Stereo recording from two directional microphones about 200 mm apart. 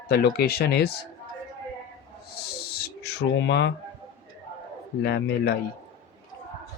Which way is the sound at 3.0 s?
60° left (ahead or behind).